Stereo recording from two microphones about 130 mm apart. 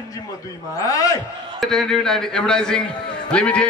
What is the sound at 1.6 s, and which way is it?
A man's voice, 5° left (ahead or behind).